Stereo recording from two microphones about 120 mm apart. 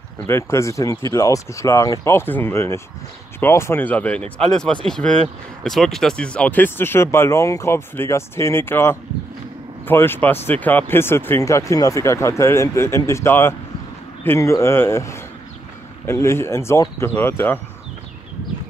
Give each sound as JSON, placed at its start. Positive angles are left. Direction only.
{"t": 0.3, "sound": "speech", "side_deg": 25}